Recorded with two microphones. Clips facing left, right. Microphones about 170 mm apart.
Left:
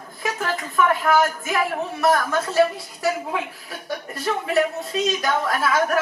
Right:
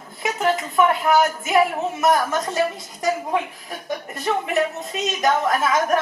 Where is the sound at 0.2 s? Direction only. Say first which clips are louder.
Right 4 dB; 20° right (ahead or behind).